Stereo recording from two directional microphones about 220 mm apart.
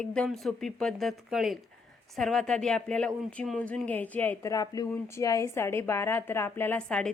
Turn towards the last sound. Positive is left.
turn(degrees=5)  # may be behind; listen again after turning